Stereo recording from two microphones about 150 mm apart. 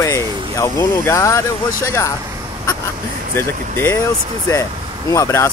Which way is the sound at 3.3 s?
15° left (ahead or behind).